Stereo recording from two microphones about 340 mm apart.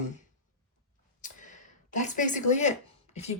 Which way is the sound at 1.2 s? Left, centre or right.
Left.